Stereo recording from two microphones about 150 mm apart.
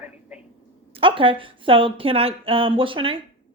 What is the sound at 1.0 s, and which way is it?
Speech, 35° right (ahead or behind).